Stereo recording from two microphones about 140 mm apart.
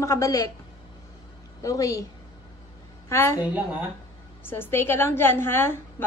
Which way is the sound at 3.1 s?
20° left (ahead or behind).